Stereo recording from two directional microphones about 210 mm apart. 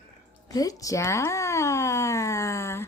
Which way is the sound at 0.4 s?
15° left (ahead or behind).